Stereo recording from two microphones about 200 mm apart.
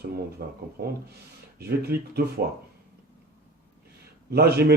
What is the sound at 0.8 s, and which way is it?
Speech, 50° right (ahead or behind).